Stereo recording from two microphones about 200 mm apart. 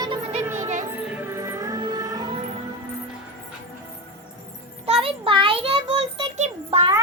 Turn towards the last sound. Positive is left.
turn(degrees=-30)  # may be behind; listen again after turning